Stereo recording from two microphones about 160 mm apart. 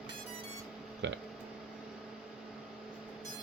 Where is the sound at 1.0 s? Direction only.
90° right.